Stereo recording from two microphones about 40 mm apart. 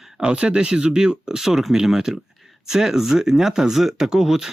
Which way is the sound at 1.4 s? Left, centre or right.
Centre.